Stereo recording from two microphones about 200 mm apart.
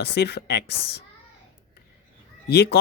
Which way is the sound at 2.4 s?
55° left (ahead or behind).